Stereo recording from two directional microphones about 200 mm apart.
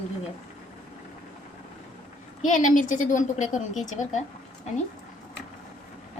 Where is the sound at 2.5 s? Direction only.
40° left (ahead or behind).